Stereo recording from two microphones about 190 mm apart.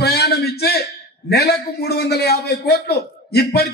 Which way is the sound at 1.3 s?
55° left (ahead or behind).